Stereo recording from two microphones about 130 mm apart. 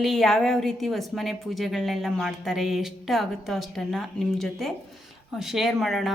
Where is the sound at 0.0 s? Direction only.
Centre (ahead or behind).